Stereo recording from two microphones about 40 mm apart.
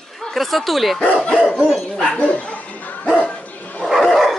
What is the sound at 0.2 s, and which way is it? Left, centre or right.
Speech, centre.